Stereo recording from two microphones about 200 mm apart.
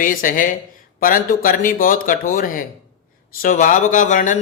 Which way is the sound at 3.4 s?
40° left (ahead or behind).